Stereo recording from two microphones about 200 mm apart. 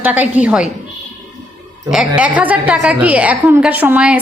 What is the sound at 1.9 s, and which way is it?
A woman's voice, 5° right (ahead or behind).